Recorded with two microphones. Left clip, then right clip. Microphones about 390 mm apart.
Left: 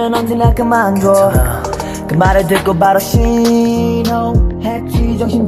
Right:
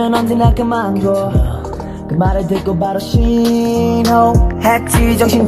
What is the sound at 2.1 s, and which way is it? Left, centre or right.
Speech, left.